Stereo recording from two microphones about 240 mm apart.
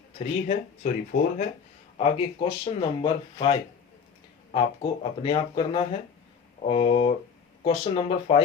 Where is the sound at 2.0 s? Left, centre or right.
Left.